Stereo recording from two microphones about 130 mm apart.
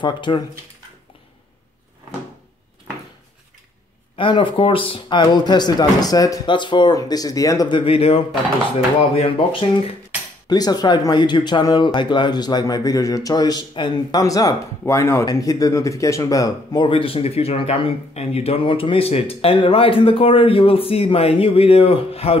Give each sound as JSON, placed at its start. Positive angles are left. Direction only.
{"t": 0.0, "sound": "speech", "side_deg": 40}
{"t": 4.2, "sound": "speech", "side_deg": 40}
{"t": 10.5, "sound": "speech", "side_deg": 30}